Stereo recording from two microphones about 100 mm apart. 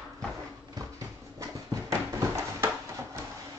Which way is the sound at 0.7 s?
35° right (ahead or behind).